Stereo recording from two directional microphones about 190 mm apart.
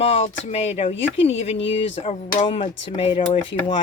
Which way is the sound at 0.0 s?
30° left (ahead or behind).